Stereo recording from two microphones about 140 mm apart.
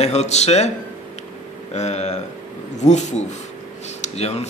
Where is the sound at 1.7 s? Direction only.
50° left (ahead or behind).